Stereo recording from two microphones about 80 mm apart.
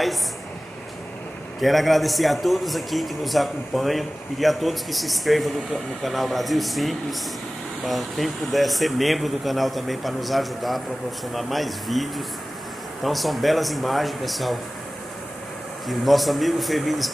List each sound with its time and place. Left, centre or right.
1.6 s a man's voice: centre
15.9 s a man's voice: centre